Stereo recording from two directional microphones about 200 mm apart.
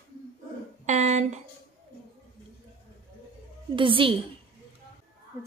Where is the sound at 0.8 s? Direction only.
35° right (ahead or behind).